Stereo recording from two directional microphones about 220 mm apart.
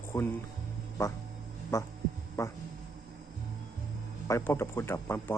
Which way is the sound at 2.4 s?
10° left (ahead or behind).